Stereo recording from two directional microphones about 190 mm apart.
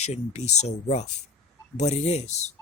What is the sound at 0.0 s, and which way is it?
Speech, 35° left (ahead or behind).